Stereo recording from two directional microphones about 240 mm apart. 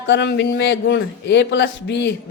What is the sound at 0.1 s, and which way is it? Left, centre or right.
A man's voice, left.